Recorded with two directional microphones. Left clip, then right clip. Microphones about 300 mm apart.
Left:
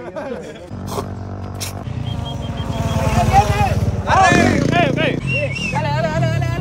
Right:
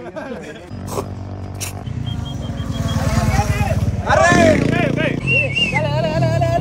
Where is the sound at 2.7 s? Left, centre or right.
Centre.